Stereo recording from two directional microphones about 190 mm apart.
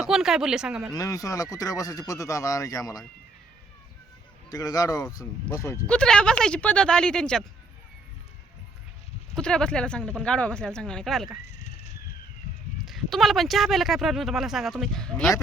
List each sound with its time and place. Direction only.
0.0 s speech: centre (ahead or behind)
0.9 s speech: 15° left (ahead or behind)
4.5 s speech: 20° left (ahead or behind)
5.9 s speech: 5° left (ahead or behind)
9.3 s speech: 5° left (ahead or behind)
11.4 s a sound: 35° left (ahead or behind)
12.8 s speech: centre (ahead or behind)